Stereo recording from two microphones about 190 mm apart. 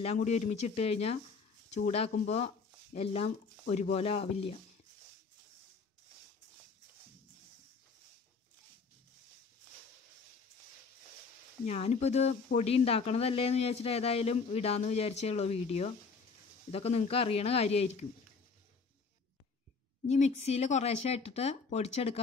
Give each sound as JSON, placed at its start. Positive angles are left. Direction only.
{"t": 0.0, "sound": "speech", "side_deg": 35}
{"t": 11.6, "sound": "speech", "side_deg": 35}
{"t": 20.1, "sound": "speech", "side_deg": 35}